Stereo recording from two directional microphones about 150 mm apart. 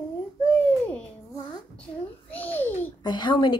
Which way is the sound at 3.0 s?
30° left (ahead or behind).